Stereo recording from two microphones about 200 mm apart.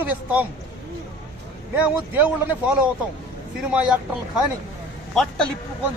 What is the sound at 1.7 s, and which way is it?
Speech, 10° right (ahead or behind).